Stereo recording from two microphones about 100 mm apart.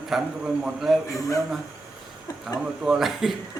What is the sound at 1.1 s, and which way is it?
Speech, 35° left (ahead or behind).